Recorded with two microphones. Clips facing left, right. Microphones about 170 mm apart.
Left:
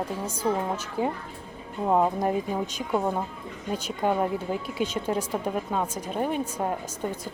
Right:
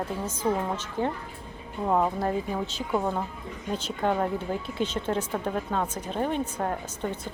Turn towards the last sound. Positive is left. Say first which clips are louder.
# left 1 dB
turn(degrees=10)  # may be behind; listen again after turning